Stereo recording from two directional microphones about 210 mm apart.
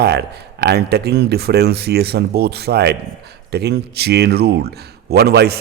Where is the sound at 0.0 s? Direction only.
50° right (ahead or behind).